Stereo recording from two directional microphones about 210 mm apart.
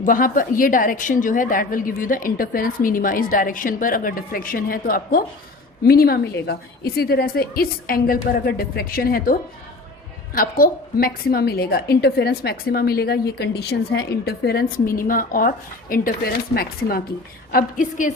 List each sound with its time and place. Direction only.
0.0 s a woman's voice: 40° left (ahead or behind)